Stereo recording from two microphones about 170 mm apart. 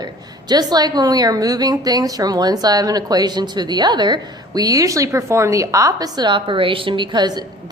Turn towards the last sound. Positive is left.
turn(degrees=-25)  # may be behind; listen again after turning